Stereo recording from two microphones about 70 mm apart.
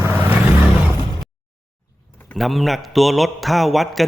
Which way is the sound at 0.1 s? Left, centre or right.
Right.